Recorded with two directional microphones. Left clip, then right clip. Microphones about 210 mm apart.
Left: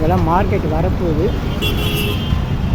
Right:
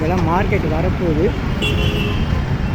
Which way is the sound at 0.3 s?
5° left (ahead or behind).